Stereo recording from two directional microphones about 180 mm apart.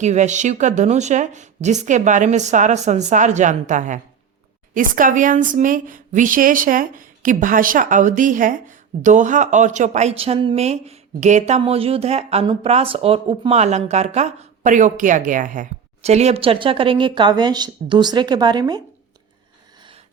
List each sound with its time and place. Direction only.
0.0 s speech: 40° right (ahead or behind); by 18.8 s 25° right (ahead or behind)